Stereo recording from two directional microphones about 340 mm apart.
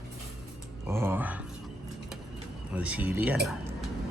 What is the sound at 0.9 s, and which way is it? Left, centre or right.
Speech, centre.